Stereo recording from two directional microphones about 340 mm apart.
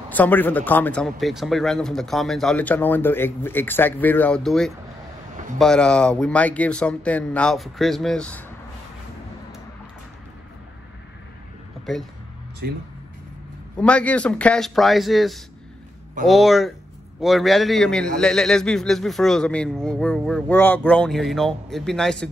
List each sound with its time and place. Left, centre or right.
0.1 s a man's voice: centre
11.8 s speech: centre
12.6 s speech: right
13.7 s a man's voice: centre